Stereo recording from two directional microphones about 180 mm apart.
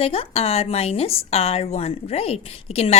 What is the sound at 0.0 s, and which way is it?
Speech, 30° left (ahead or behind).